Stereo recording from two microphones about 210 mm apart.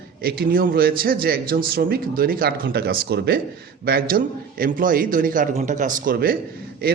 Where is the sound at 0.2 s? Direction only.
45° right (ahead or behind).